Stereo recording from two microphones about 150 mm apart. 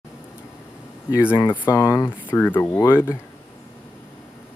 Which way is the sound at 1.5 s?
20° left (ahead or behind).